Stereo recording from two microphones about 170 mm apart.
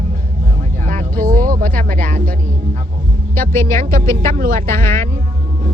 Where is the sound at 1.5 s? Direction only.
55° right (ahead or behind).